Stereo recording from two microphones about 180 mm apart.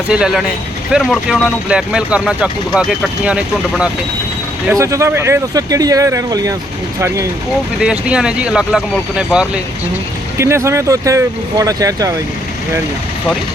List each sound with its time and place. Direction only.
0.1 s speech: 5° right (ahead or behind)
4.7 s speech: 15° right (ahead or behind)
7.8 s speech: 5° right (ahead or behind)
10.3 s speech: 15° right (ahead or behind)